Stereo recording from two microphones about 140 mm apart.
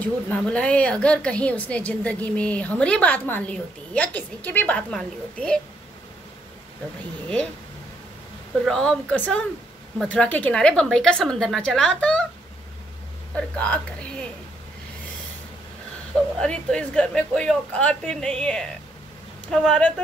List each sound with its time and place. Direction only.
0.0 s a woman's voice: 10° left (ahead or behind)
8.6 s a woman's voice: 5° left (ahead or behind)
13.3 s a woman's voice: 10° left (ahead or behind)
16.3 s a woman's voice: 5° left (ahead or behind)